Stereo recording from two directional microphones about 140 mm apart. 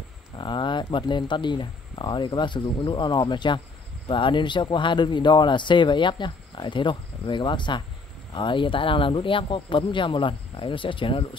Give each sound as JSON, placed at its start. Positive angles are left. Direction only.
{"t": 0.4, "sound": "a man's voice", "side_deg": 35}